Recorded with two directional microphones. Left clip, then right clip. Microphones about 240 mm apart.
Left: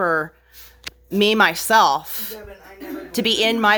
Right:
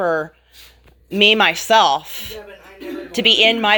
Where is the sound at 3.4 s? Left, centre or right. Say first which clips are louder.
Right 3 dB; centre.